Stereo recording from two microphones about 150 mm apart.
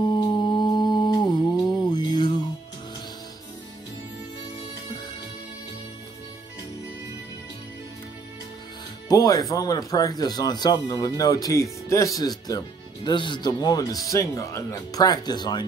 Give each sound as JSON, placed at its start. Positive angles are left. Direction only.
{"t": 0.2, "sound": "humming", "side_deg": 30}
{"t": 1.9, "sound": "music", "side_deg": 30}
{"t": 9.1, "sound": "speech", "side_deg": 25}